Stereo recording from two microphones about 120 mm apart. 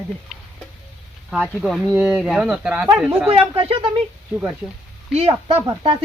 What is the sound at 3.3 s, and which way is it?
Speech, 50° right (ahead or behind).